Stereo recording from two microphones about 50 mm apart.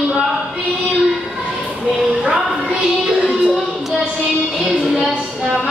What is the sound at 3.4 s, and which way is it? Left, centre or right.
Music, centre.